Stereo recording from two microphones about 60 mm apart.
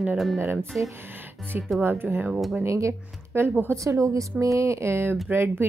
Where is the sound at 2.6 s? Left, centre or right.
Right.